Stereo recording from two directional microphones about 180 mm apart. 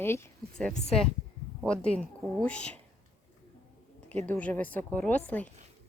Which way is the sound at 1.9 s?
5° left (ahead or behind).